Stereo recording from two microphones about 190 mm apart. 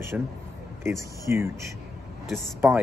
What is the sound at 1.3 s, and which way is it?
Speech, 10° right (ahead or behind).